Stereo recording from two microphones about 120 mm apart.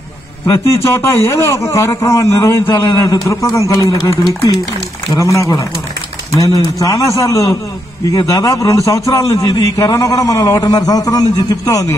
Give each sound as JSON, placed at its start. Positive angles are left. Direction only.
{"t": 0.8, "sound": "a man's voice", "side_deg": 20}
{"t": 2.9, "sound": "a man's voice", "side_deg": 30}